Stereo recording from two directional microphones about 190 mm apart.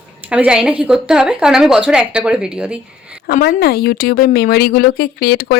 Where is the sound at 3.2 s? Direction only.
50° left (ahead or behind).